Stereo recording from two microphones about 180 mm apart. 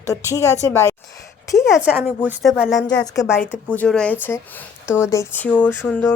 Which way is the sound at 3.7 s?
5° left (ahead or behind).